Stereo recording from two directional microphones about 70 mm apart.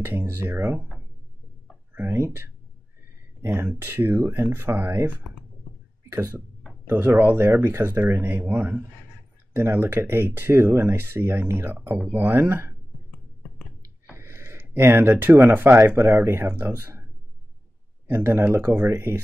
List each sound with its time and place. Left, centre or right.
0.0 s speech: right
1.7 s a sound: centre
2.1 s speech: right
3.8 s speech: right
6.1 s speech: right
6.9 s speech: right
14.1 s a sound: right
15.9 s speech: right
18.0 s speech: right